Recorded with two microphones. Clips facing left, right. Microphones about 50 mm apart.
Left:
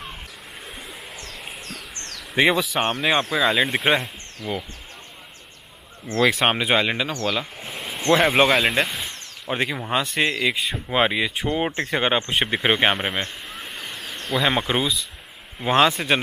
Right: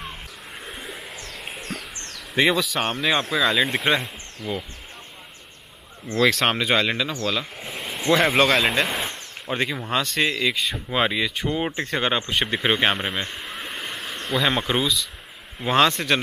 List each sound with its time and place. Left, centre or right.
0.7 s a sound: centre
2.3 s speech: centre
6.1 s speech: centre
7.5 s a sound: centre
8.1 s speech: centre
8.6 s speech: centre
13.2 s a sound: centre
13.9 s insect: centre
14.3 s speech: centre